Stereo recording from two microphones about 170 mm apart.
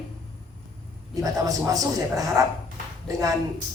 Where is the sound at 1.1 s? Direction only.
20° right (ahead or behind).